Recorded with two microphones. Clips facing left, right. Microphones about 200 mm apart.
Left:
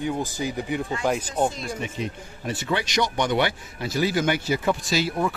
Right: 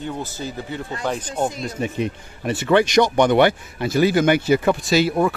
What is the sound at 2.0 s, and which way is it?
Speech, 65° right (ahead or behind).